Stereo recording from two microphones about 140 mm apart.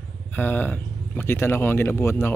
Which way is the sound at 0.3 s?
10° left (ahead or behind).